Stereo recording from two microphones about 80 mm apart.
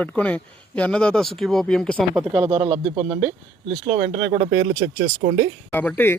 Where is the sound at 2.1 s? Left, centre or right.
Centre.